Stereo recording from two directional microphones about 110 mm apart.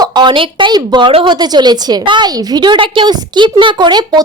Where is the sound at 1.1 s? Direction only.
55° right (ahead or behind).